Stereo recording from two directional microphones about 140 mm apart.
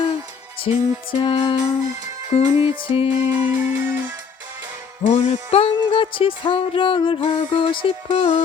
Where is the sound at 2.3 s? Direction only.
40° left (ahead or behind).